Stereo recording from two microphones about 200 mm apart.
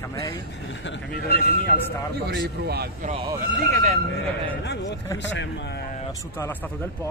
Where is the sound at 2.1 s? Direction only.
55° right (ahead or behind).